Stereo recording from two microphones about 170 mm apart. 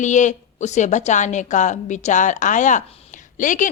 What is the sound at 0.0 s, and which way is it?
A woman's voice, 45° left (ahead or behind).